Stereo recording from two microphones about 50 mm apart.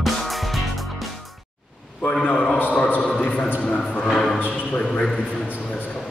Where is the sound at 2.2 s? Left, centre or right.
Centre.